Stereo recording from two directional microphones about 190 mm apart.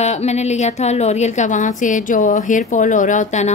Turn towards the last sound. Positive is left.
turn(degrees=40)  # may be behind; listen again after turning